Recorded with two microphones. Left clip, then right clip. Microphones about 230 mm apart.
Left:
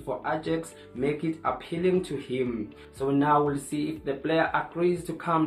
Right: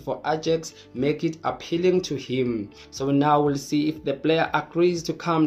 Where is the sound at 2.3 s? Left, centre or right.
Right.